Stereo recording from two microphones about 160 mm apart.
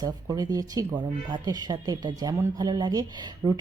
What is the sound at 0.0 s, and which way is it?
A woman's voice, 25° right (ahead or behind).